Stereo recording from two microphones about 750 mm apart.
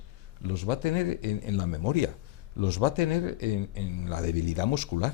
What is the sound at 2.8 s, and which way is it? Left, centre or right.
Speech, left.